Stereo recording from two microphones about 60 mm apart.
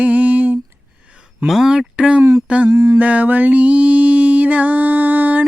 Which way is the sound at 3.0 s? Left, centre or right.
Right.